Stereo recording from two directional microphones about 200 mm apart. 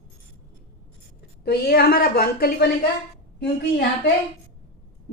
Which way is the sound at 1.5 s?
50° left (ahead or behind).